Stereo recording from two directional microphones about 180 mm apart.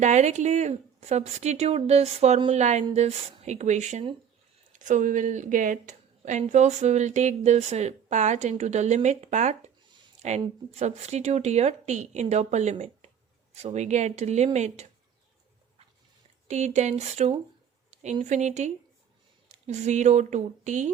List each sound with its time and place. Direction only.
0.0 s a woman's voice: 40° right (ahead or behind)
16.5 s a woman's voice: 40° right (ahead or behind)